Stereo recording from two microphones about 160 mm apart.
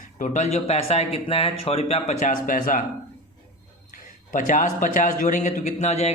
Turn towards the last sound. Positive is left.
turn(degrees=40)  # may be behind; listen again after turning